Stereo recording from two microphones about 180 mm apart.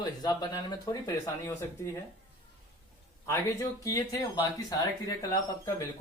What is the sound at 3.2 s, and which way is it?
Speech, 15° left (ahead or behind).